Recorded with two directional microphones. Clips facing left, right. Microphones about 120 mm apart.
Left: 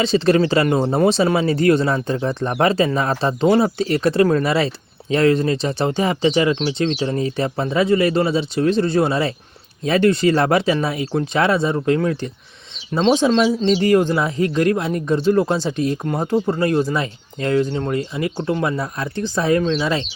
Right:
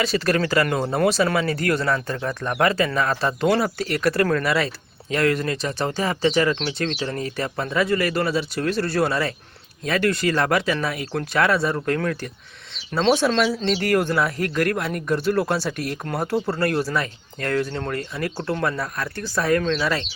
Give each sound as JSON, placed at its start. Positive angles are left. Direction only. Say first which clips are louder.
{"t": 0.0, "sound": "speech", "louder": "left 6 dB", "side_deg": 25}
{"t": 13.1, "sound": "speech", "louder": "left 4 dB", "side_deg": 20}
{"t": 18.8, "sound": "speech", "louder": "left 4 dB", "side_deg": 25}